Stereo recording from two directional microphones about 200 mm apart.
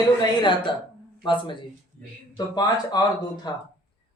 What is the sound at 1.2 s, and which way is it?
Speech, 25° left (ahead or behind).